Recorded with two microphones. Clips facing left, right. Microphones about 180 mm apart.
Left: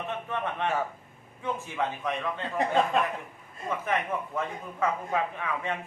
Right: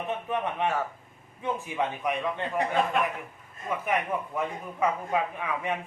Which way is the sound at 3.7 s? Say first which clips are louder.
Right 1 dB; 15° right (ahead or behind).